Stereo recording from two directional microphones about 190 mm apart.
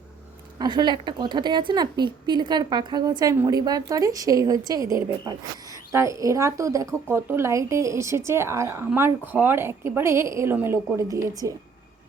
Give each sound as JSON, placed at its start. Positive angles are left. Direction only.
{"t": 0.6, "sound": "a woman's voice", "side_deg": -25}